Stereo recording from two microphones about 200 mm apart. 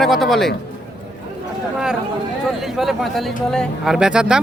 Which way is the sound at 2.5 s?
Centre (ahead or behind).